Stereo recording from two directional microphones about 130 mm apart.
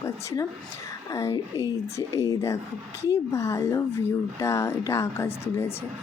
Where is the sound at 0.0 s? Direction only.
25° left (ahead or behind).